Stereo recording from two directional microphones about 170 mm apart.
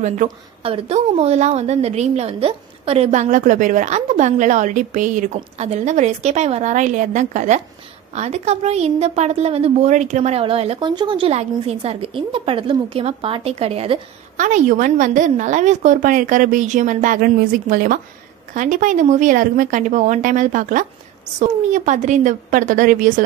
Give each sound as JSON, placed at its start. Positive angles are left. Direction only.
{"t": 0.0, "sound": "a woman's voice", "side_deg": -40}